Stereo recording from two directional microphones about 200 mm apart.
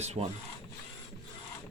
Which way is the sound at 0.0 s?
30° right (ahead or behind).